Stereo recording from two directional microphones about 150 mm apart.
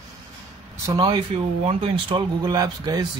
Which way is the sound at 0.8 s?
25° right (ahead or behind).